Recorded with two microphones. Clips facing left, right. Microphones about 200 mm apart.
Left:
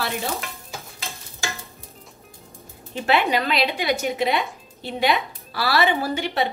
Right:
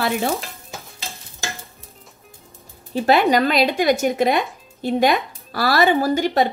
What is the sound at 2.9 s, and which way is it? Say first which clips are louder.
Speech: right 5 dB; 40° right (ahead or behind).